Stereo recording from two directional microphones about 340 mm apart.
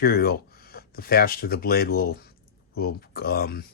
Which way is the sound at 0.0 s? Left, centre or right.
Left.